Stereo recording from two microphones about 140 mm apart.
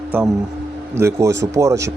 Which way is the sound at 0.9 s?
20° right (ahead or behind).